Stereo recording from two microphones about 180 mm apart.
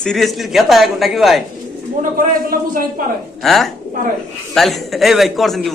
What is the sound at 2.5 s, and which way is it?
Speech, 50° right (ahead or behind).